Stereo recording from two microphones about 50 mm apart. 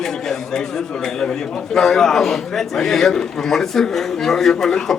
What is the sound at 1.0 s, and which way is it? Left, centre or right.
A man's voice, centre.